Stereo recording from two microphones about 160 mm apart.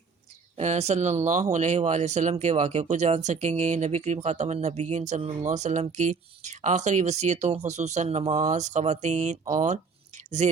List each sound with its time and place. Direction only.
0.5 s speech: 45° right (ahead or behind)